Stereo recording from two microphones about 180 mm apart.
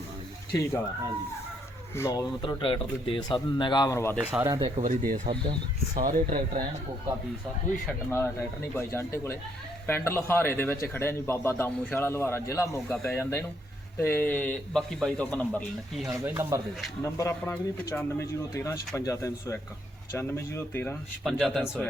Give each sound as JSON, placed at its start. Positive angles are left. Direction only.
{"t": 2.0, "sound": "a man's voice", "side_deg": 15}
{"t": 2.4, "sound": "speech", "side_deg": 30}
{"t": 4.2, "sound": "speech", "side_deg": -10}
{"t": 4.8, "sound": "speech", "side_deg": -45}
{"t": 5.3, "sound": "speech", "side_deg": -30}
{"t": 6.0, "sound": "speech", "side_deg": -50}
{"t": 8.1, "sound": "a man's voice", "side_deg": 10}
{"t": 16.0, "sound": "speech", "side_deg": -15}
{"t": 17.0, "sound": "a man's voice", "side_deg": 15}
{"t": 21.2, "sound": "speech", "side_deg": 0}